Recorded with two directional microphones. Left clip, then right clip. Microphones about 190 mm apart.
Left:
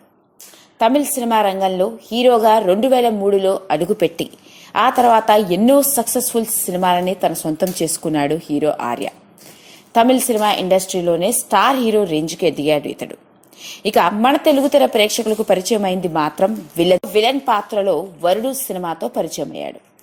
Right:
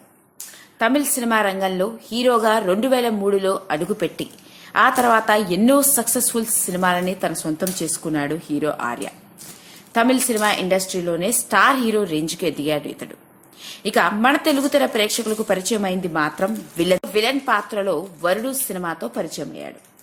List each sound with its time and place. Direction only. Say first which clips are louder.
0.8 s a woman's voice: left 4 dB; 15° left (ahead or behind)